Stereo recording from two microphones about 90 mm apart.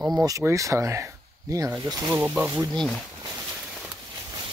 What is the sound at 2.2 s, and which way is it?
Speech, 20° right (ahead or behind).